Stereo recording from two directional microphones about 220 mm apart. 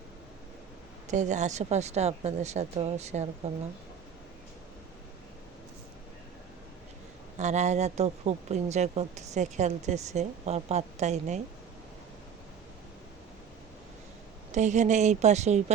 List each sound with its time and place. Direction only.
1.0 s speech: 35° right (ahead or behind)
7.3 s speech: 30° right (ahead or behind)
14.5 s speech: 35° right (ahead or behind)